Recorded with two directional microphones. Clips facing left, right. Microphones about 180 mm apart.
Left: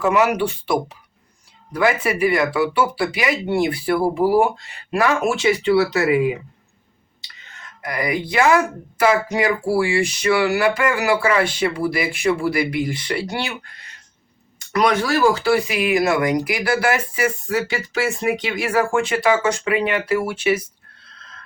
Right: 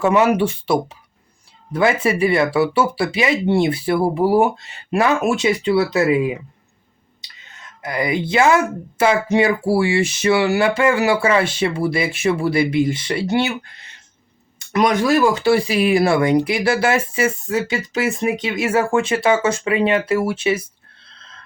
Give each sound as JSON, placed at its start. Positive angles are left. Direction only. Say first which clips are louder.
{"t": 0.0, "sound": "speech", "louder": "right 2 dB", "side_deg": -25}
{"t": 1.7, "sound": "speech", "louder": "right 2 dB", "side_deg": -25}
{"t": 7.8, "sound": "speech", "louder": "right 2 dB", "side_deg": -25}